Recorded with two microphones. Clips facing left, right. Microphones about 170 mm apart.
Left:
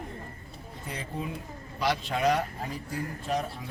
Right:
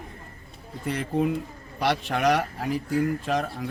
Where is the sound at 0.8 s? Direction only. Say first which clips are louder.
Right 11 dB; 70° right (ahead or behind).